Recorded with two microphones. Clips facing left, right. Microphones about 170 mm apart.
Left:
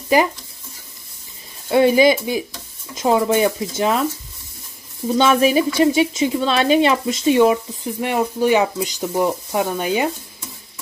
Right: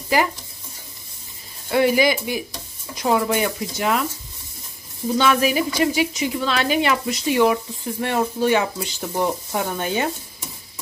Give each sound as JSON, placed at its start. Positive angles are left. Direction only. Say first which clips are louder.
{"t": 1.7, "sound": "a woman's voice", "louder": "left 4 dB", "side_deg": 25}
{"t": 5.1, "sound": "a woman's voice", "louder": "left 4 dB", "side_deg": 25}